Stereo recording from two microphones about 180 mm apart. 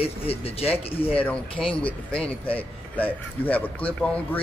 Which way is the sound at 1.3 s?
5° left (ahead or behind).